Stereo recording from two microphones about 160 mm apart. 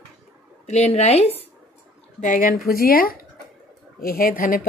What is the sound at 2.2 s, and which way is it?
Speech, 60° left (ahead or behind).